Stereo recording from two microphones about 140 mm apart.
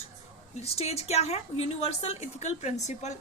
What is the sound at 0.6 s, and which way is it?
A woman's voice, 45° left (ahead or behind).